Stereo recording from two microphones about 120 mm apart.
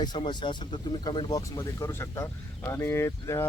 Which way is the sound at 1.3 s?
30° left (ahead or behind).